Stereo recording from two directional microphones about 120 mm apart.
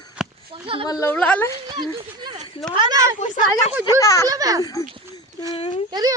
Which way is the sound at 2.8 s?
35° right (ahead or behind).